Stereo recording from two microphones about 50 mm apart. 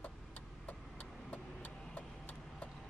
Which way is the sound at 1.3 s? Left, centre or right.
Left.